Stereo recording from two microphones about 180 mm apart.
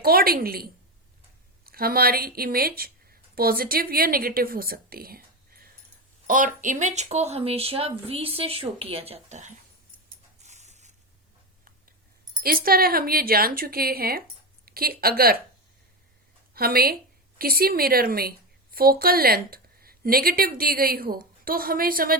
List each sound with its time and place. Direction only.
0.0 s a woman's voice: 55° right (ahead or behind); by 9.6 s 40° right (ahead or behind)
10.4 s a sound: 40° right (ahead or behind)
12.3 s a woman's voice: 55° right (ahead or behind)
16.6 s a woman's voice: 55° right (ahead or behind)